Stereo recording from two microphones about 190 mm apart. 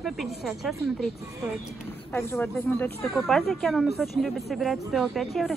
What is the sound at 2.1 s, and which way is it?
Speech, 10° left (ahead or behind).